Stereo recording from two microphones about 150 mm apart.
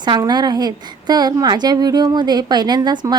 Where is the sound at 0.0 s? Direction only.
30° right (ahead or behind).